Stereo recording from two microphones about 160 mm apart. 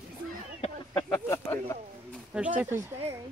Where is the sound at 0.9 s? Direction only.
15° left (ahead or behind).